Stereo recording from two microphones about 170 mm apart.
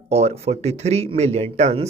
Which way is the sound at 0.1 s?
40° right (ahead or behind).